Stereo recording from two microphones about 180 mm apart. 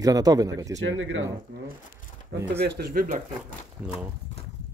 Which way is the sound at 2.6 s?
65° right (ahead or behind).